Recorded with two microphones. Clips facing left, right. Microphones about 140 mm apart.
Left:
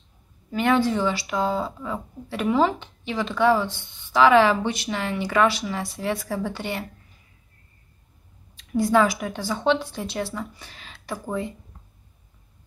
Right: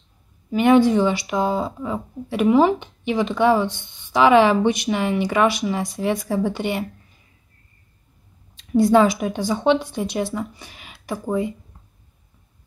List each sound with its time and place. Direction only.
0.5 s speech: 15° right (ahead or behind)
8.5 s speech: 25° right (ahead or behind)